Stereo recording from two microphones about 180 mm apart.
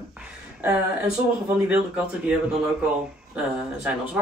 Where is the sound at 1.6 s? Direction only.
5° right (ahead or behind).